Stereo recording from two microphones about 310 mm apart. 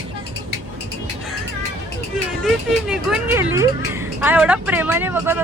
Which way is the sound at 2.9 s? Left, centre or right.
Centre.